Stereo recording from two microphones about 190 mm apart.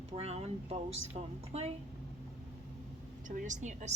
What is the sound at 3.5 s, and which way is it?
Speech, 40° right (ahead or behind).